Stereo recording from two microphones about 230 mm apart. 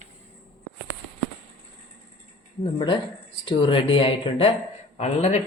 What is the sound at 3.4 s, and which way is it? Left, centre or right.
Speech, left.